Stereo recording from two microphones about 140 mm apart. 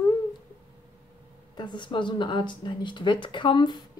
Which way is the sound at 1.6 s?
35° left (ahead or behind).